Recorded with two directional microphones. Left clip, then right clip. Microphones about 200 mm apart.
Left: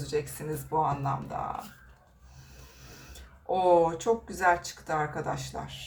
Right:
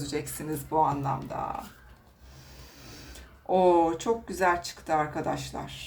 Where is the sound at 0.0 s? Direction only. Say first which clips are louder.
Left 2 dB; 30° right (ahead or behind).